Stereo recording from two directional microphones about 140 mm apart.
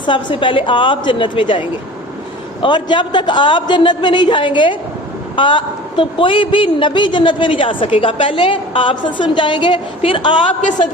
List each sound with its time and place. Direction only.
0.0 s a woman's voice: 35° left (ahead or behind)
10.6 s a woman's voice: 60° left (ahead or behind)